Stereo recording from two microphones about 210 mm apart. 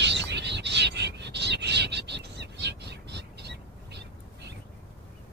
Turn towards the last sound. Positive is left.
turn(degrees=-55)  # may be behind; listen again after turning